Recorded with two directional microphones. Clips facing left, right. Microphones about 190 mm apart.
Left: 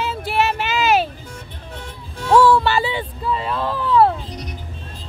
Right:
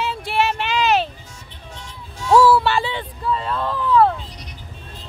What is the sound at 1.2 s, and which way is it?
Music, 60° left (ahead or behind).